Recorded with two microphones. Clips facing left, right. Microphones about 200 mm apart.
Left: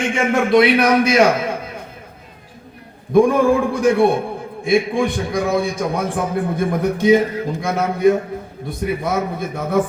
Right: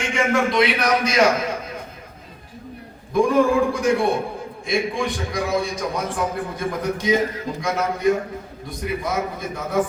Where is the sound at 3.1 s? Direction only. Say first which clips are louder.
Left 4 dB; 55° left (ahead or behind).